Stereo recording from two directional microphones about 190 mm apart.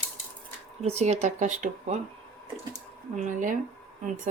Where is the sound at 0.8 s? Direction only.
35° right (ahead or behind).